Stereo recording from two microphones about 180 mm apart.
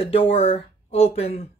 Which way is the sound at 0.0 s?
30° left (ahead or behind).